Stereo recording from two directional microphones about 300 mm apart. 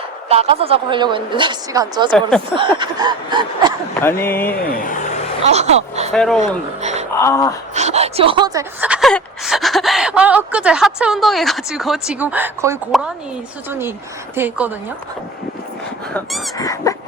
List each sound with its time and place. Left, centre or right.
0.3 s a woman's voice: centre
4.0 s speech: centre
4.7 s speech: left
5.4 s speech: right
6.1 s speech: centre
7.8 s a woman's voice: right; by 14.7 s centre
16.1 s speech: centre